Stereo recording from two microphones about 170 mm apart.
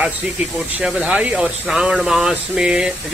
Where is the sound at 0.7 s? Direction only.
5° right (ahead or behind).